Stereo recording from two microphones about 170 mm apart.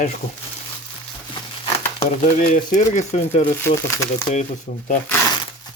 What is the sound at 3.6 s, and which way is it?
Speech, 15° left (ahead or behind).